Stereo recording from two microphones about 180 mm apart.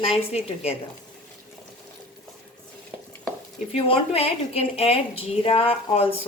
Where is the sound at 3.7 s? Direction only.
35° left (ahead or behind).